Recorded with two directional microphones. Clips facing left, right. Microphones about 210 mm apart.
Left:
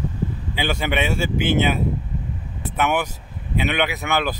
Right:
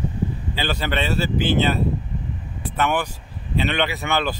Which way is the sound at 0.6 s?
10° left (ahead or behind).